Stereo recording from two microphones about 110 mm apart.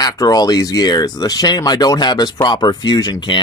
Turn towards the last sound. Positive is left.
turn(degrees=40)  # may be behind; listen again after turning